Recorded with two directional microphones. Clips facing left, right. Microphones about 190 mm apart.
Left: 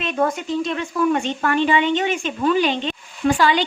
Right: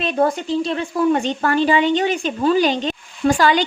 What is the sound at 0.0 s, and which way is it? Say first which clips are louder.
A woman's voice: right 3 dB; 35° right (ahead or behind).